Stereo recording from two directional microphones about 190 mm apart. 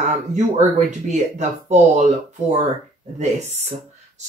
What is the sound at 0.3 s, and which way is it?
Speech, 40° right (ahead or behind).